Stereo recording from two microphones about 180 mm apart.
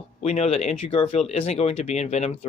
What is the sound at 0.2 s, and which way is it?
Speech, 35° left (ahead or behind).